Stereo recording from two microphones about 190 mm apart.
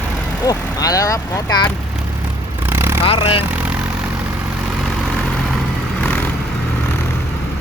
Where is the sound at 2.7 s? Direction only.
10° right (ahead or behind).